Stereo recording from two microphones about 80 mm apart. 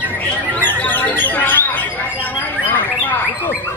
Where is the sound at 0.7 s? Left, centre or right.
Left.